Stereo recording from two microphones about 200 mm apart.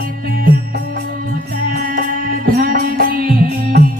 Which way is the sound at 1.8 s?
45° right (ahead or behind).